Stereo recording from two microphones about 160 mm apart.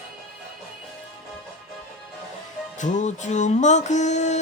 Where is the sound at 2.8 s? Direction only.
50° left (ahead or behind).